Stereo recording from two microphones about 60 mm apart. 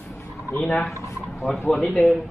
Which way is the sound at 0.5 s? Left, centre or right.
Left.